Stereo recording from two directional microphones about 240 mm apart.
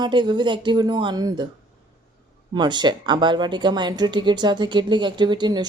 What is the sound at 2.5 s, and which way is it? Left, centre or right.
Speech, centre.